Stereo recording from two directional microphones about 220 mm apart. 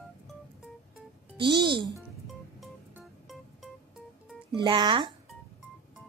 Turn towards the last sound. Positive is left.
turn(degrees=-20)  # may be behind; listen again after turning